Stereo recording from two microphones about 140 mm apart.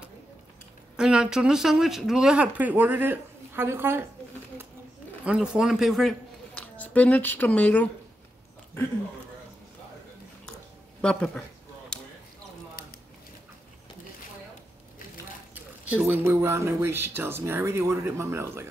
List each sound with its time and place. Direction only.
0.9 s speech: 5° right (ahead or behind)
5.2 s a woman's voice: 5° right (ahead or behind); by 7.9 s 10° left (ahead or behind)
11.0 s speech: 5° left (ahead or behind)
15.5 s speech: 15° right (ahead or behind)